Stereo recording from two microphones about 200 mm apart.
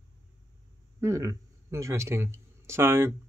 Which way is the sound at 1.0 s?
15° right (ahead or behind).